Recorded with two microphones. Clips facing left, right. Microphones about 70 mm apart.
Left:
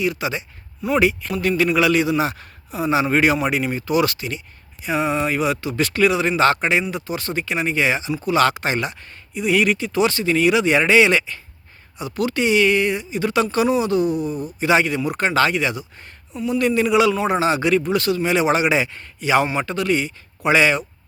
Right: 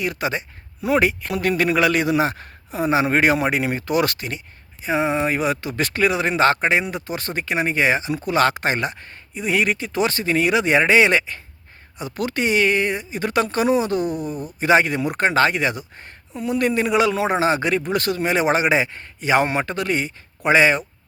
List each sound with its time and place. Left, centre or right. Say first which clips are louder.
0.0 s speech: left 1 dB; right
4.9 s speech: even; right